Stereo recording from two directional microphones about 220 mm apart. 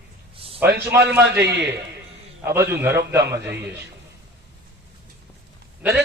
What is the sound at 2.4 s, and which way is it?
A man's voice, 10° right (ahead or behind).